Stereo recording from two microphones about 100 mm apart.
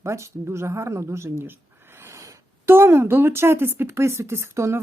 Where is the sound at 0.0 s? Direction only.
30° right (ahead or behind).